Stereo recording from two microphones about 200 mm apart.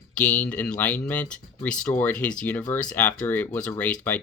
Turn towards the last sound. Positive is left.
turn(degrees=10)  # may be behind; listen again after turning